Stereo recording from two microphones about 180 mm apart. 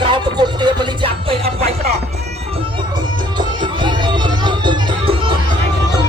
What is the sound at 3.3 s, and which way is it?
Music, 25° right (ahead or behind).